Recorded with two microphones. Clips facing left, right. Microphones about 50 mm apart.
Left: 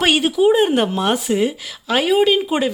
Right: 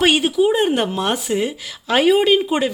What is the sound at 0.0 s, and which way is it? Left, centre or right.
Speech, centre.